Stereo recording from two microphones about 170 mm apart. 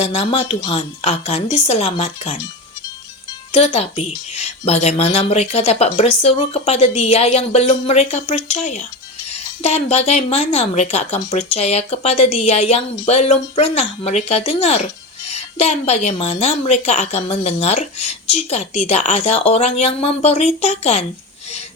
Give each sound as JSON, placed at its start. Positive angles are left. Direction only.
{"t": 0.0, "sound": "a woman's voice", "side_deg": 40}
{"t": 3.5, "sound": "a woman's voice", "side_deg": 40}